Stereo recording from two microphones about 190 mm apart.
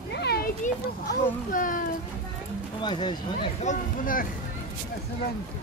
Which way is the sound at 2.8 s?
25° left (ahead or behind).